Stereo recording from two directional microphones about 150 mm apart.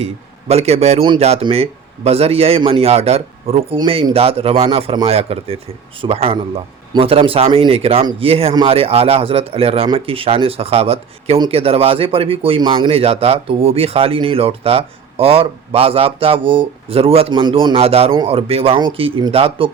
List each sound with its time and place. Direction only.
0.0 s a man's voice: 45° right (ahead or behind)